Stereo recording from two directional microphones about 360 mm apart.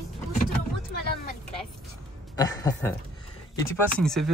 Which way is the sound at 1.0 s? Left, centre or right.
Left.